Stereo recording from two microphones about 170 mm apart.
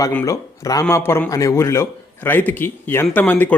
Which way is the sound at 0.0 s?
15° left (ahead or behind).